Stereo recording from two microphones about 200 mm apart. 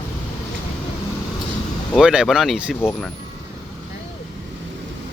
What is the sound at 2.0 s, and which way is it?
Speech, 5° right (ahead or behind).